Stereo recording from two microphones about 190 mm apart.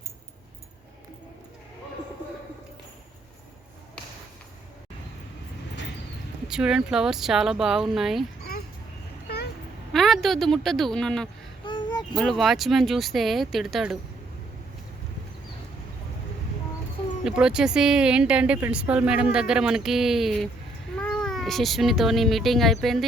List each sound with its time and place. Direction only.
6.5 s speech: 5° right (ahead or behind)
9.2 s vehicle: 55° left (ahead or behind)
9.9 s speech: centre (ahead or behind)
11.6 s a sound: 25° left (ahead or behind)
12.1 s speech: centre (ahead or behind)
17.2 s speech: 5° right (ahead or behind)